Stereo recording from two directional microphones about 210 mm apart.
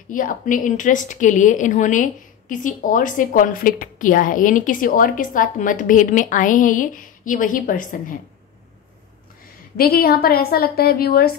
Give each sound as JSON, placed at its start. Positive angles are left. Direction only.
{"t": 0.1, "sound": "a woman's voice", "side_deg": 40}
{"t": 9.8, "sound": "a woman's voice", "side_deg": 45}